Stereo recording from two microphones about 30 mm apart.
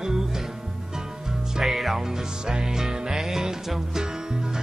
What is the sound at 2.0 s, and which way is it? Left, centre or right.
Music, right.